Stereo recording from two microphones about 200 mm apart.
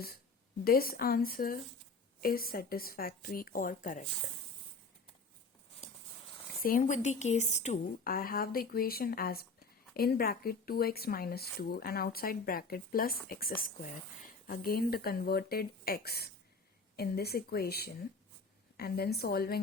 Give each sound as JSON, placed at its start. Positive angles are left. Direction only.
{"t": 0.6, "sound": "a woman's voice", "side_deg": 50}
{"t": 6.6, "sound": "a woman's voice", "side_deg": 45}